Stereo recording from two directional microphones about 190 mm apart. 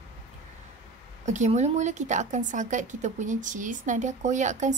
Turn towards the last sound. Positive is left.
turn(degrees=-40)  # may be behind; listen again after turning